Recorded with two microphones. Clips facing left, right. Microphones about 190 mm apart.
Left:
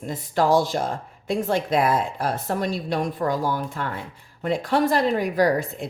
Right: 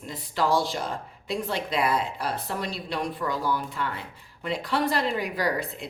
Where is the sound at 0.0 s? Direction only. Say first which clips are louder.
Left 5 dB; 50° left (ahead or behind).